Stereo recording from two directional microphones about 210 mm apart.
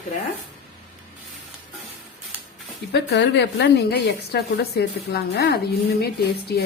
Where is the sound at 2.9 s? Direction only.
55° left (ahead or behind).